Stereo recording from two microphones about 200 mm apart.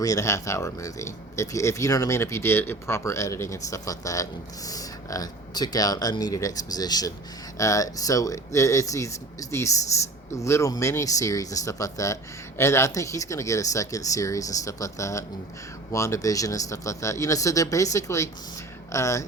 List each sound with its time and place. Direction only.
0.0 s speech: 15° left (ahead or behind)